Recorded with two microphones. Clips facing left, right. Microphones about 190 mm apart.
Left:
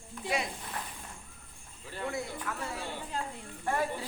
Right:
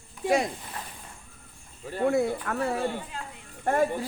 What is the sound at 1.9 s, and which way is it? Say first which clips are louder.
Speech: right 12 dB; 50° right (ahead or behind).